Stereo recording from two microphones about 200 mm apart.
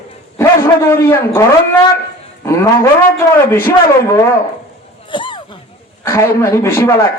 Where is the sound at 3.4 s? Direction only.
10° left (ahead or behind).